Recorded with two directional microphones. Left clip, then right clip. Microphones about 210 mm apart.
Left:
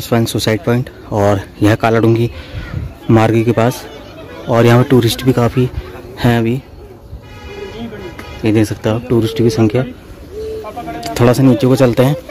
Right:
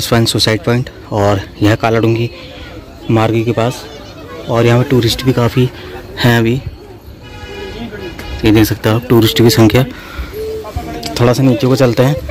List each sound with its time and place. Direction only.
0.0 s a man's voice: 5° left (ahead or behind)
8.4 s speech: centre (ahead or behind)
11.1 s speech: 20° left (ahead or behind)